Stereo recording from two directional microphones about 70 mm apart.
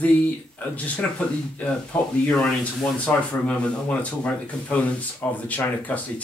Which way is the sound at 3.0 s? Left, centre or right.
Centre.